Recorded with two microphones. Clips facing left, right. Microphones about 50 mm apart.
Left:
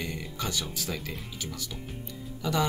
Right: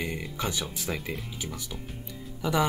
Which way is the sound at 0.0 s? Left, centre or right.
Centre.